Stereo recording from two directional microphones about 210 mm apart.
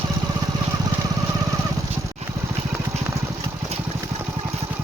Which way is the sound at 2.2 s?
30° right (ahead or behind).